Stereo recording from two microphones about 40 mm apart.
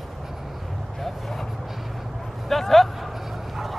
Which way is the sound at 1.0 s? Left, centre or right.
Centre.